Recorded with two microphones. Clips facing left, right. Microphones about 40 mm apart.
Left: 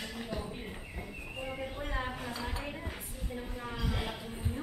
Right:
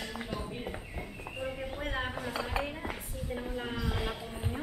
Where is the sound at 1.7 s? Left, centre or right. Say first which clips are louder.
Right 2 dB; right.